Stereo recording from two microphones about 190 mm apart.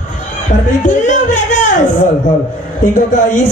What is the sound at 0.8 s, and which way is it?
Music, 40° left (ahead or behind).